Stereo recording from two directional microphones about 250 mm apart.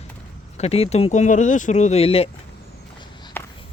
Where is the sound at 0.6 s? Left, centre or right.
Left.